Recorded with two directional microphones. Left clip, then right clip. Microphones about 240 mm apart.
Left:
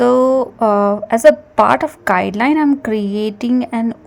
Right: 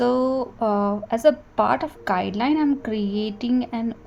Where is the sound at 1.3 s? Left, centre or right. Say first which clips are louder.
Left 9 dB; left.